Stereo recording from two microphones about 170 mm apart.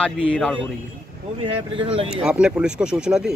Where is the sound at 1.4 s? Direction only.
30° right (ahead or behind).